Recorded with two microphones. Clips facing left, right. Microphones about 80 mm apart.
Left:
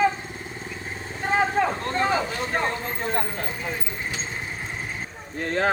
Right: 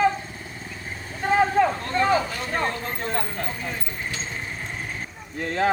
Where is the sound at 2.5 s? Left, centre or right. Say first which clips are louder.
Right 1 dB; centre.